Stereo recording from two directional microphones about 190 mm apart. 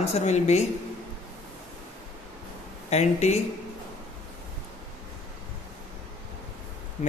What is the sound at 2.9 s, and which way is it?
Speech, 35° left (ahead or behind).